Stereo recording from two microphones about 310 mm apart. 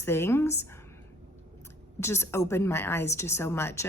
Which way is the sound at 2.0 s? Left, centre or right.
Centre.